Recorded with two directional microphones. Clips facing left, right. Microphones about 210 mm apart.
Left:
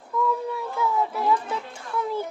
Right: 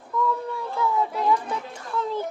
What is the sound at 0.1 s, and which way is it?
Child singing, centre (ahead or behind).